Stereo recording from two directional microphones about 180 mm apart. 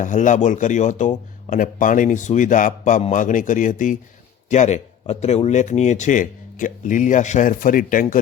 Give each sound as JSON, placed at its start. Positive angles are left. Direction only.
{"t": 0.0, "sound": "speech", "side_deg": 45}